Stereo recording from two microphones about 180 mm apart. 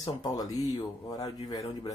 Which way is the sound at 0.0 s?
20° left (ahead or behind).